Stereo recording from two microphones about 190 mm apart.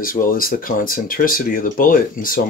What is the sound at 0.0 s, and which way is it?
Speech, 45° left (ahead or behind).